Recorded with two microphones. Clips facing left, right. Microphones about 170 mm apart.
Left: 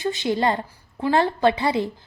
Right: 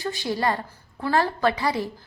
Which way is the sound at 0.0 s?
20° left (ahead or behind).